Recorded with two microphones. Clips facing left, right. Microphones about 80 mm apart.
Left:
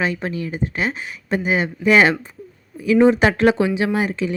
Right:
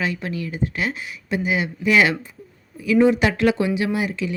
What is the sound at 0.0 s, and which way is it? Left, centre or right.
Speech, left.